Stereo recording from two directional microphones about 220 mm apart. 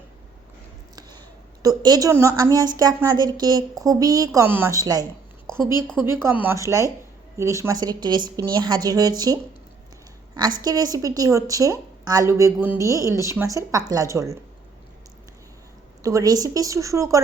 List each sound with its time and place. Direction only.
1.6 s a woman's voice: 15° right (ahead or behind)
6.1 s a woman's voice: 10° right (ahead or behind)
16.0 s a woman's voice: 15° right (ahead or behind)